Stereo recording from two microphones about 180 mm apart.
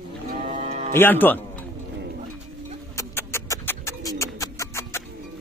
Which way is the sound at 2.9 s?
15° left (ahead or behind).